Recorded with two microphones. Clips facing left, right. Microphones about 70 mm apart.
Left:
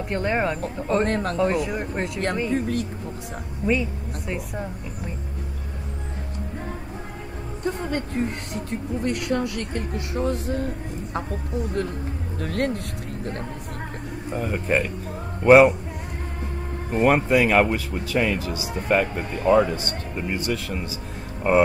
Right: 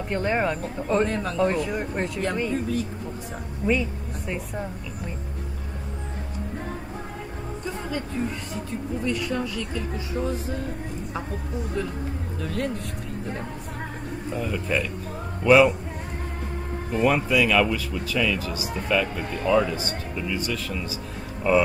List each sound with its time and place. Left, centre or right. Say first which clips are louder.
0.1 s speech: even; centre
1.0 s a woman's voice: left 2 dB; left
1.4 s speech: right 2 dB; centre
2.5 s speech: left 2 dB; left
7.6 s a woman's voice: left 5 dB; left
12.4 s a woman's voice: left 4 dB; left
14.3 s speech: left 3 dB; left
16.9 s speech: left 3 dB; left
18.5 s a woman's voice: left 1 dB; left
18.9 s speech: left 3 dB; left
20.3 s a woman's voice: left 4 dB; left
21.4 s speech: left 2 dB; left